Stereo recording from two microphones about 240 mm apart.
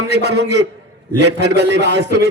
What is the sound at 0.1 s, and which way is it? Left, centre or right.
A man's voice, right.